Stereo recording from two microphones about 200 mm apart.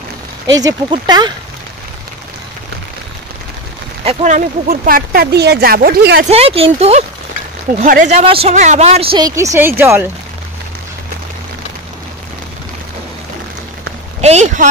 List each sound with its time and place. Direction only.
0.5 s speech: 20° right (ahead or behind)
4.0 s speech: 35° right (ahead or behind); by 6.2 s 50° right (ahead or behind)
6.2 s speech: 30° right (ahead or behind)
9.3 s speech: 15° right (ahead or behind)
14.2 s speech: 35° right (ahead or behind)